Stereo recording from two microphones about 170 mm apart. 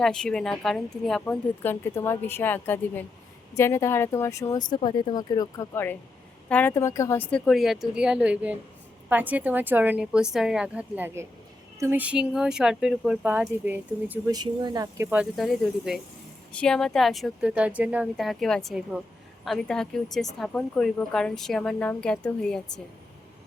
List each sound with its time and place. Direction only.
0.0 s a woman's voice: 5° left (ahead or behind)
14.3 s a woman's voice: 25° right (ahead or behind); by 22.8 s 5° left (ahead or behind)